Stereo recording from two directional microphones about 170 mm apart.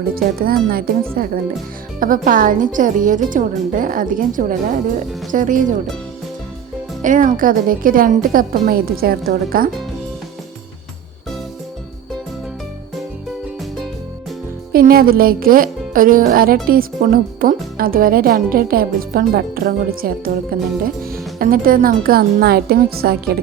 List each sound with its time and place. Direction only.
0.1 s a woman's voice: 60° right (ahead or behind)
7.0 s speech: 50° right (ahead or behind)
14.7 s speech: 60° right (ahead or behind)